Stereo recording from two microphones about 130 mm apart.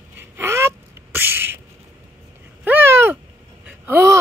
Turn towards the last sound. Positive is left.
turn(degrees=-20)  # may be behind; listen again after turning